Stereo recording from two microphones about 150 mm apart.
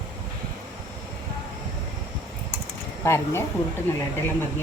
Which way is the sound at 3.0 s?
15° left (ahead or behind).